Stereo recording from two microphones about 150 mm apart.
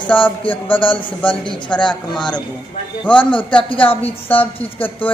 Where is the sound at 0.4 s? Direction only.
35° left (ahead or behind).